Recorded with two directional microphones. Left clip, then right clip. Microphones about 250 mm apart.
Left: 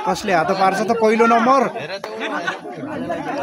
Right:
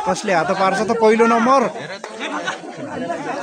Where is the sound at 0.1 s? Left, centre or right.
Centre.